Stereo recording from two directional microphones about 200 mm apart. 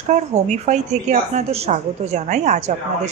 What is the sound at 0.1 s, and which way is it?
A woman's voice, 35° right (ahead or behind).